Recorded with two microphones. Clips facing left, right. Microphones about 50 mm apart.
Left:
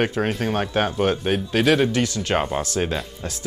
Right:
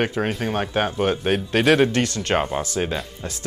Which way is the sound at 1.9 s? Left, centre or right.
Right.